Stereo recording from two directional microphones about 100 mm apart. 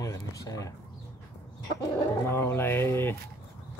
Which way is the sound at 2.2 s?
25° left (ahead or behind).